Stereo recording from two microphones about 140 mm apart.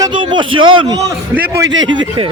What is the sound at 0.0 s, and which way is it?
A man's voice, 35° right (ahead or behind).